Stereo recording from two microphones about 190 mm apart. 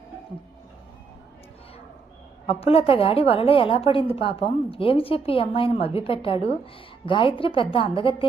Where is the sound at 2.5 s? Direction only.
30° left (ahead or behind).